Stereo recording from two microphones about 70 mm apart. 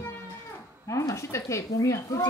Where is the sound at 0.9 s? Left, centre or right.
Left.